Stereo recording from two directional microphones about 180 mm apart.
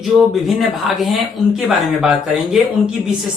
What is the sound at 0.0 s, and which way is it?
Speech, centre (ahead or behind).